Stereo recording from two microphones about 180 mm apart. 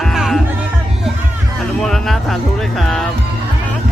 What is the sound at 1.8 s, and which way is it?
A man's voice, centre (ahead or behind).